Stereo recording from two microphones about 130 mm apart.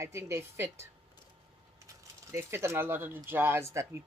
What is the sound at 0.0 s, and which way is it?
Speech, 20° right (ahead or behind).